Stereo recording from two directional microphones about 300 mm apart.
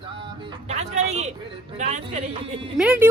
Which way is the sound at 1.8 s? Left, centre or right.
Right.